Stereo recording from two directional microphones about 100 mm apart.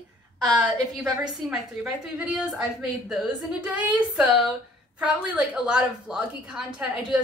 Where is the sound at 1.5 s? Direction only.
15° right (ahead or behind).